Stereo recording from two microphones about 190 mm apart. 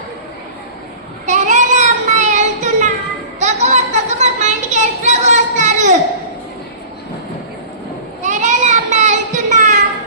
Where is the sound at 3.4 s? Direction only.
40° right (ahead or behind).